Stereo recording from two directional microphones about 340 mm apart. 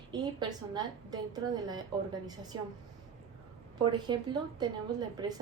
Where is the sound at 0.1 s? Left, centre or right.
Centre.